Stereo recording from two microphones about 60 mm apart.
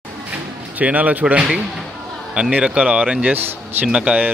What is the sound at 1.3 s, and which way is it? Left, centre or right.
Speech, right.